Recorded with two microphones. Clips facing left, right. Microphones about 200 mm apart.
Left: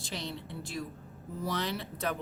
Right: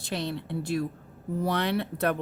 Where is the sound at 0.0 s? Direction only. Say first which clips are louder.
Right 7 dB; 60° right (ahead or behind).